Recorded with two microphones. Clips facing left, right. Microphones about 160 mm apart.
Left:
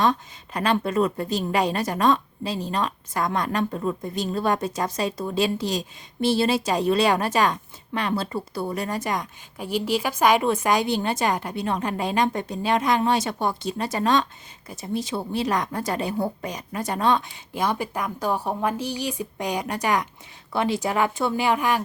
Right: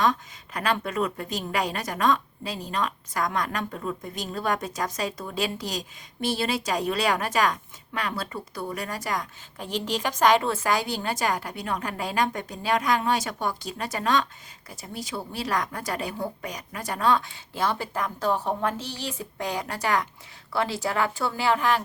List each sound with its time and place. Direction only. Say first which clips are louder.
0.0 s a woman's voice: left 2 dB; 30° left (ahead or behind)
9.6 s a woman's voice: left 4 dB; 10° left (ahead or behind)